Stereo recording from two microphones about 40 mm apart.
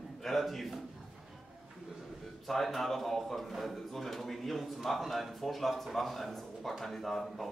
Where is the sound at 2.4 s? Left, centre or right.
Centre.